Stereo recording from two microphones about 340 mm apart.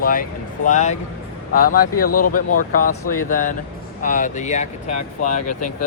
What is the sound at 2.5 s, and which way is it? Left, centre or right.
Speech, left.